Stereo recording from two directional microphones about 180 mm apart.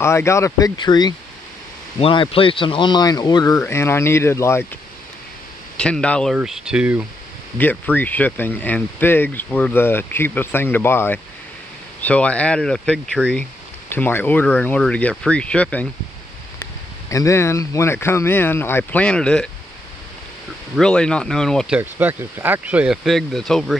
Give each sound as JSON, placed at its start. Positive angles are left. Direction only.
{"t": 0.0, "sound": "speech", "side_deg": 15}
{"t": 5.8, "sound": "speech", "side_deg": 5}
{"t": 7.5, "sound": "speech", "side_deg": 10}
{"t": 17.1, "sound": "speech", "side_deg": 15}
{"t": 20.7, "sound": "speech", "side_deg": 5}